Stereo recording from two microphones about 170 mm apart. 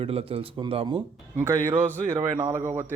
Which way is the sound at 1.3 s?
15° right (ahead or behind).